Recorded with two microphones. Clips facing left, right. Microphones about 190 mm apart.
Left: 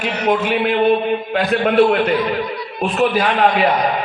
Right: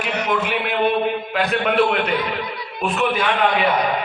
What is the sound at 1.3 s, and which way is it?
A man's voice, 40° left (ahead or behind).